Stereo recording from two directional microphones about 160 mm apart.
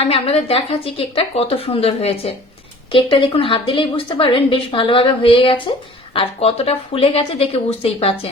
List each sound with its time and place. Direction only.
0.0 s a woman's voice: 40° left (ahead or behind)